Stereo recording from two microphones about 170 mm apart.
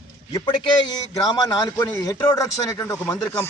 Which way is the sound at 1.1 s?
20° left (ahead or behind).